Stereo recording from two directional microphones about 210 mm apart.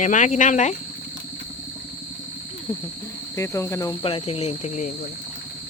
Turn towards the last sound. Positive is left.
turn(degrees=35)  # may be behind; listen again after turning